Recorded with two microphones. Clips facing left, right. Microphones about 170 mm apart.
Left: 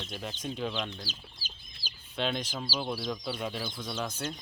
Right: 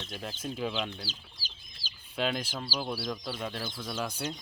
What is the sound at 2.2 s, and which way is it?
Speech, 5° right (ahead or behind).